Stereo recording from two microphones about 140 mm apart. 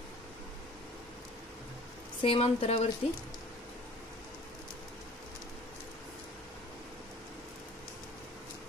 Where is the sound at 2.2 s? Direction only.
40° left (ahead or behind).